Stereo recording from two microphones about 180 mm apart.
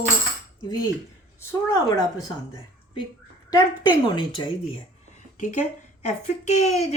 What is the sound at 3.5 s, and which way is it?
Speech, 25° left (ahead or behind).